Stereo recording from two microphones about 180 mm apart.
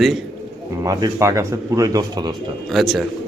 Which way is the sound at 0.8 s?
20° right (ahead or behind).